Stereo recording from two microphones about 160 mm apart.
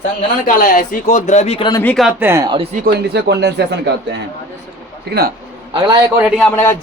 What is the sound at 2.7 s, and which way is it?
A man's voice, 80° right.